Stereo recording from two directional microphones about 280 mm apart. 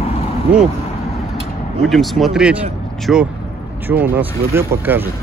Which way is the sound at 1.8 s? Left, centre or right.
Centre.